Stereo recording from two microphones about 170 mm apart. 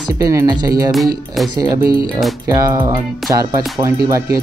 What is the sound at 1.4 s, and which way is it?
Speech, centre (ahead or behind).